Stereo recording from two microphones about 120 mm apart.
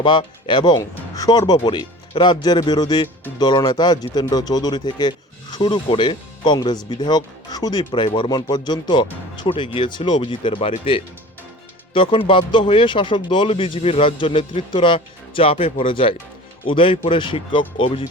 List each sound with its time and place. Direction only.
0.0 s speech: 40° left (ahead or behind)
12.3 s speech: 45° left (ahead or behind)